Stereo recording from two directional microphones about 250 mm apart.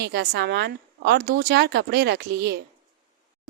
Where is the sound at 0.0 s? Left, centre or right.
Right.